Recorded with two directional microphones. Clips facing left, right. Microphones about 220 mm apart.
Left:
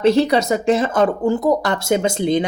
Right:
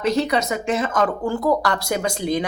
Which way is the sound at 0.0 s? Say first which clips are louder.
Left 6 dB; 30° left (ahead or behind).